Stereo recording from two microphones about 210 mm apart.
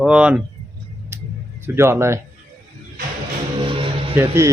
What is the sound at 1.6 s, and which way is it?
Speech, 10° right (ahead or behind).